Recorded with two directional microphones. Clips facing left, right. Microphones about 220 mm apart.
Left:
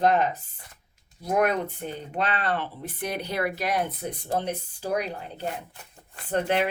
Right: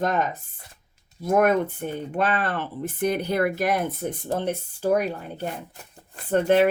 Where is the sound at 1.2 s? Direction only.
50° right (ahead or behind).